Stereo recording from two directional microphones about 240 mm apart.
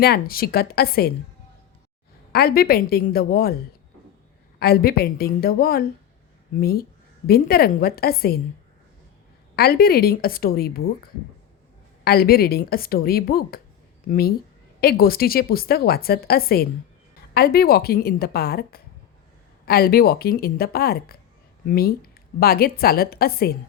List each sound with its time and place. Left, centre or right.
0.0 s a woman's voice: left
2.3 s a woman's voice: left
4.6 s a woman's voice: left
9.6 s a woman's voice: left
12.0 s a woman's voice: left